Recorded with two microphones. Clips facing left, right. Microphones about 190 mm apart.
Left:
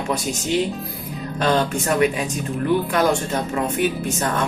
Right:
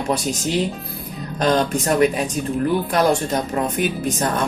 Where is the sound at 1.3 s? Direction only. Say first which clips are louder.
Right 2 dB; 40° right (ahead or behind).